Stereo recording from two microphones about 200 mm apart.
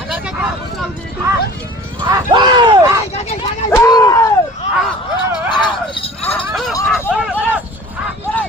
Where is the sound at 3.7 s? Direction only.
15° left (ahead or behind).